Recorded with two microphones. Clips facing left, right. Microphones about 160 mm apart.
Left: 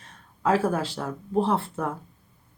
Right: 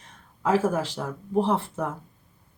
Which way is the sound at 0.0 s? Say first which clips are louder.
Left 2 dB; 20° right (ahead or behind).